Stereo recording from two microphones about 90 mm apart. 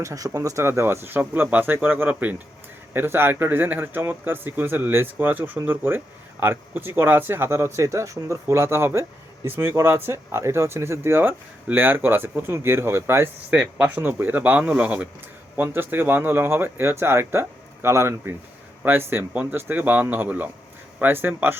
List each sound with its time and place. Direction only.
0.0 s speech: 40° right (ahead or behind)
13.5 s speech: 15° right (ahead or behind)
15.5 s speech: 25° right (ahead or behind)